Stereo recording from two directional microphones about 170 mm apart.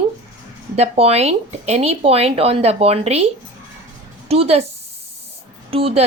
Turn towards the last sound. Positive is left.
turn(degrees=-35)  # may be behind; listen again after turning